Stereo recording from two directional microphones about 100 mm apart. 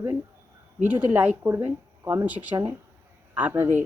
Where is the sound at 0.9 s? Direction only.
15° right (ahead or behind).